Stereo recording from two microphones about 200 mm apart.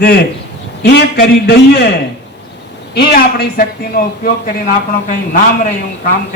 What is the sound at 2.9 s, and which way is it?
Speech, 50° left (ahead or behind).